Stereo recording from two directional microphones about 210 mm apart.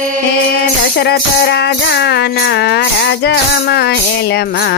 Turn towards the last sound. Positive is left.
turn(degrees=50)  # may be behind; listen again after turning